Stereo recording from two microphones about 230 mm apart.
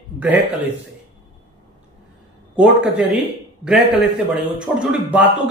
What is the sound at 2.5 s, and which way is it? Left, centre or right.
Speech, centre.